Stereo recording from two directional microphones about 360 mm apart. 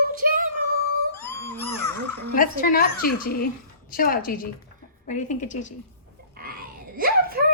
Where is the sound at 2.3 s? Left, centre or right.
Left.